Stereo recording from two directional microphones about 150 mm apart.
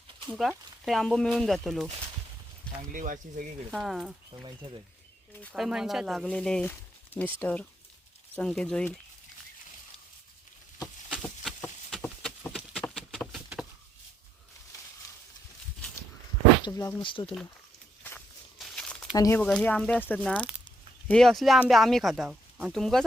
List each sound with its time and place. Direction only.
0.3 s speech: centre (ahead or behind)
2.9 s speech: 65° right (ahead or behind)
3.7 s speech: centre (ahead or behind)
5.5 s speech: 5° right (ahead or behind)
11.9 s a sound: centre (ahead or behind)
16.6 s speech: 20° left (ahead or behind)
17.0 s speech: 35° left (ahead or behind)
18.6 s a sound: 5° left (ahead or behind)
19.1 s speech: 25° left (ahead or behind)
19.4 s speech: 5° left (ahead or behind)